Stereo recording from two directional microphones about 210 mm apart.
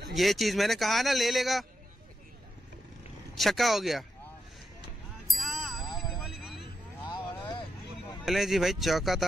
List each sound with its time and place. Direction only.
0.1 s speech: centre (ahead or behind)
3.3 s speech: centre (ahead or behind)
5.3 s a sound: centre (ahead or behind)
7.1 s vehicle: 20° left (ahead or behind)
8.3 s speech: centre (ahead or behind)